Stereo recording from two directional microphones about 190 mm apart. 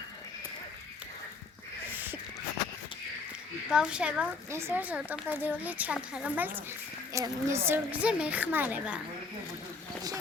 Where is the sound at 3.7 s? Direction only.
5° right (ahead or behind).